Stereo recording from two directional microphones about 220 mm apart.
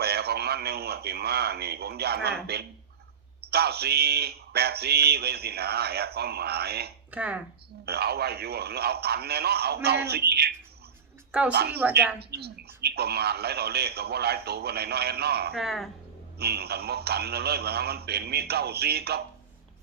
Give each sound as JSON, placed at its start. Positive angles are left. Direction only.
{"t": 0.0, "sound": "speech", "side_deg": -45}
{"t": 7.1, "sound": "speech", "side_deg": -5}
{"t": 7.9, "sound": "speech", "side_deg": -45}
{"t": 11.3, "sound": "a woman's voice", "side_deg": -5}
{"t": 11.5, "sound": "speech", "side_deg": -45}
{"t": 15.5, "sound": "speech", "side_deg": 0}
{"t": 16.4, "sound": "speech", "side_deg": -45}